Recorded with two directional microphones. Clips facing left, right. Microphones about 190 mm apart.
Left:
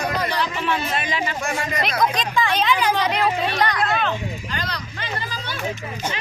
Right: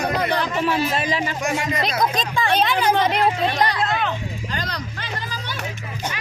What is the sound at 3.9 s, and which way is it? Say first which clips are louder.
Speech: left 1 dB; 15° right (ahead or behind).